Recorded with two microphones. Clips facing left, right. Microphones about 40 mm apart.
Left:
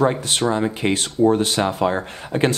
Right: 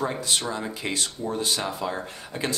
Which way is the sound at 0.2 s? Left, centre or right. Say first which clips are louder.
Left 8 dB; left.